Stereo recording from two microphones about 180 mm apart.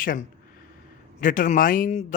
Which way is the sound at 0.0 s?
50° left (ahead or behind).